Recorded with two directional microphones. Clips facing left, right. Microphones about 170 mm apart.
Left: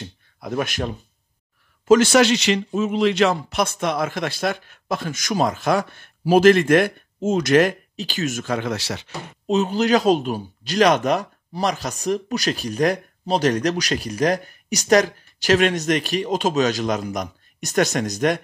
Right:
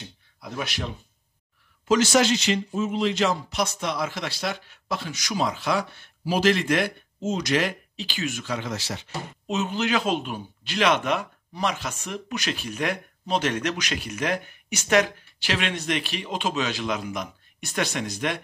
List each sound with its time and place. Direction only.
0.0 s a sound: 50° left (ahead or behind)
1.9 s a man's voice: 60° left (ahead or behind); by 9.1 s 75° left (ahead or behind)
9.5 s speech: 35° left (ahead or behind)